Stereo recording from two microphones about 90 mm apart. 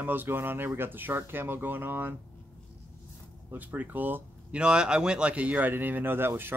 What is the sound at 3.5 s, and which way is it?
Speech, 20° right (ahead or behind).